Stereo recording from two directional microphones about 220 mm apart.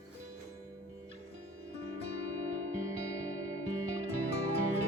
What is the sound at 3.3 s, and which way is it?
Music, 70° right (ahead or behind).